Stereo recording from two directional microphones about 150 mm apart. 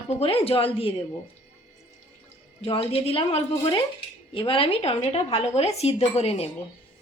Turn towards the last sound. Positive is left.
turn(degrees=40)  # may be behind; listen again after turning